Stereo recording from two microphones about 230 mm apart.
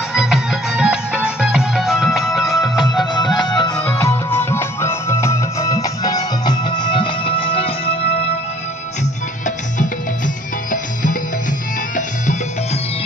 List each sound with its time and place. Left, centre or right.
0.1 s music: centre
3.3 s music: centre
9.8 s music: left